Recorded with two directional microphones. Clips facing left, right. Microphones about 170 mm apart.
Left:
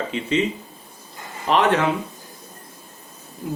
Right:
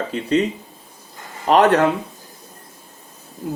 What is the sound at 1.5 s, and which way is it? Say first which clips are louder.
Speech: right 4 dB; 40° right (ahead or behind).